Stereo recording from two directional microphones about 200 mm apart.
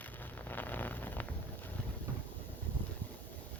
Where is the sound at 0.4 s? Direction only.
10° left (ahead or behind).